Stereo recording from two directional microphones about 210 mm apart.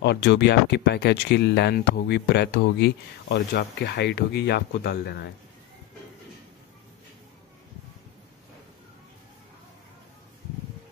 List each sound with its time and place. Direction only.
0.0 s speech: 50° left (ahead or behind)